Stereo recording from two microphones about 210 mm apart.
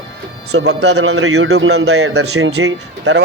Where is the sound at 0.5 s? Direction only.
55° right (ahead or behind).